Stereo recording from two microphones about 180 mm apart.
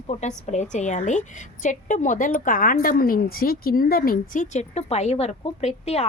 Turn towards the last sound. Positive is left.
turn(degrees=35)  # may be behind; listen again after turning